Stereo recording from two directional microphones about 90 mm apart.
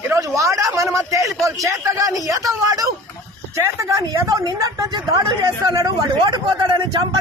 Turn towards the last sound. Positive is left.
turn(degrees=-55)  # may be behind; listen again after turning